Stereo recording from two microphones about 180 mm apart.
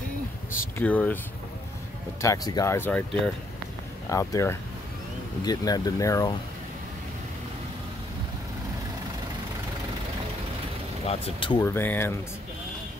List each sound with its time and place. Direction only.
0.7 s speech: 10° left (ahead or behind)
2.2 s speech: 20° left (ahead or behind)
4.1 s speech: 15° left (ahead or behind)
11.1 s speech: 30° left (ahead or behind)
11.6 s speech: 10° left (ahead or behind)